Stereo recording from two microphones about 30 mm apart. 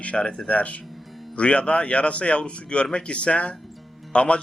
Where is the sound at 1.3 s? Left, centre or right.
Left.